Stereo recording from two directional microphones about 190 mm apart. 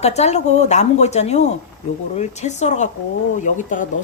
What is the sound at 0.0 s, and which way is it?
Speech, 35° left (ahead or behind).